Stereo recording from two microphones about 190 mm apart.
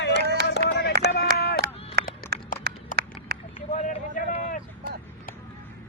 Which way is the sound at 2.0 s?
60° right (ahead or behind).